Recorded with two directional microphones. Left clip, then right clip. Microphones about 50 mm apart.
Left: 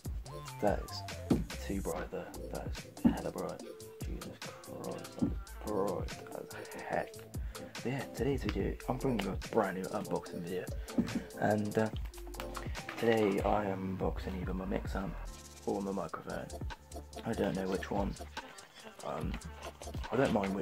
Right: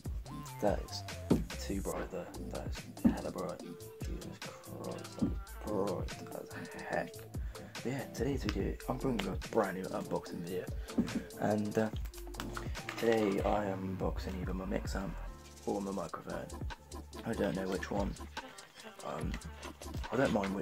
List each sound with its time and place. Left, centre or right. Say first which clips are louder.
0.6 s music: left 1 dB; centre
1.7 s speech: left 1 dB; centre
14.0 s speech: left 2 dB; right
15.6 s speech: left 1 dB; centre
17.2 s music: left 1 dB; right
17.6 s speech: left 1 dB; centre
19.1 s speech: left 2 dB; centre